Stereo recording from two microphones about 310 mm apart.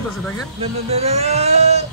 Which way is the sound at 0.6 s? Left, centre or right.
Centre.